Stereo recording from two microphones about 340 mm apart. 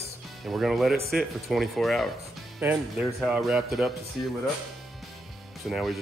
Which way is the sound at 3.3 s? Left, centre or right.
Centre.